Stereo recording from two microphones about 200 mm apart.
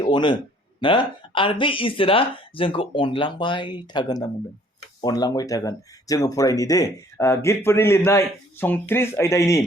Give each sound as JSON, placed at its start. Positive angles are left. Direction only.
{"t": 0.0, "sound": "speech", "side_deg": 25}